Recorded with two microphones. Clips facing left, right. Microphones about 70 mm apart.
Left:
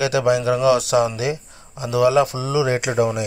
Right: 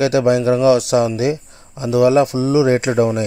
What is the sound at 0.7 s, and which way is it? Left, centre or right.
Speech, left.